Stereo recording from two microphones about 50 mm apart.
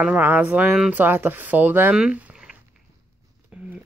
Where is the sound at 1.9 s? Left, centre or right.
Centre.